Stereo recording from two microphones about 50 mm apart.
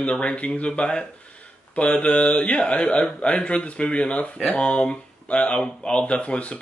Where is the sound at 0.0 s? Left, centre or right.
Left.